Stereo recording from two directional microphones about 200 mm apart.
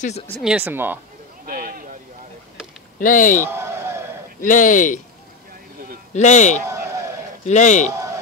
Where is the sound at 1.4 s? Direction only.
45° right (ahead or behind).